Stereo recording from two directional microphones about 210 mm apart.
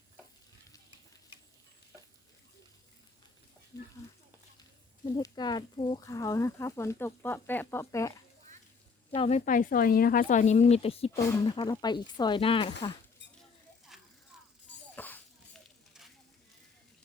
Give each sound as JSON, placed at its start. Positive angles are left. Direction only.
{"t": 3.7, "sound": "speech", "side_deg": 15}
{"t": 5.1, "sound": "speech", "side_deg": 20}
{"t": 9.1, "sound": "speech", "side_deg": 30}
{"t": 13.9, "sound": "a sound", "side_deg": 0}
{"t": 14.9, "sound": "a sound", "side_deg": 10}
{"t": 15.9, "sound": "sizzle", "side_deg": 0}